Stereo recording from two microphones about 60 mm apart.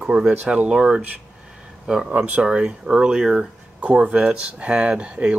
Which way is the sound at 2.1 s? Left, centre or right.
Right.